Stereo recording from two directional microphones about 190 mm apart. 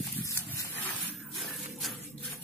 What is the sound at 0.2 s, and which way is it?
Dog, 15° left (ahead or behind).